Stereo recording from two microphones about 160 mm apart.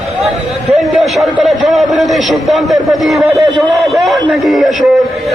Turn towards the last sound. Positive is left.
turn(degrees=0)  # may be behind; listen again after turning